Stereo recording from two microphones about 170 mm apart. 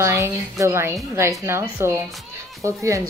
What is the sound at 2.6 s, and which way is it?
Speech, 15° right (ahead or behind).